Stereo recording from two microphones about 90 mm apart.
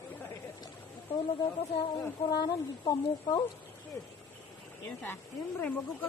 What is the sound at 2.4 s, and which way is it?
Speech, 50° left (ahead or behind).